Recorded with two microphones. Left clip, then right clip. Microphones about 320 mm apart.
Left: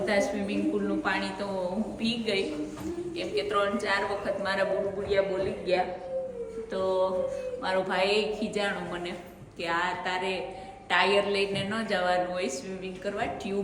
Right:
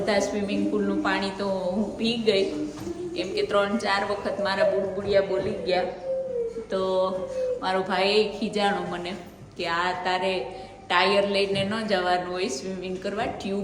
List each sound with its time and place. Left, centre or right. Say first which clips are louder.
0.0 s a woman's voice: right 3 dB; centre
5.7 s a woman's voice: right 3 dB; centre